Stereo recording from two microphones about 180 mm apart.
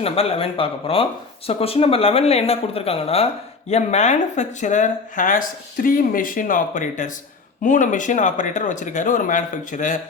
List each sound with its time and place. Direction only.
0.0 s speech: 35° left (ahead or behind)